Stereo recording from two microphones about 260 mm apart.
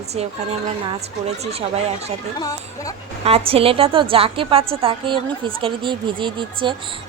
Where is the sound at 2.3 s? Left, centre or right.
Centre.